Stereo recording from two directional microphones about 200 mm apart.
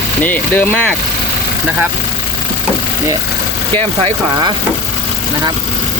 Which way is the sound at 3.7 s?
30° right (ahead or behind).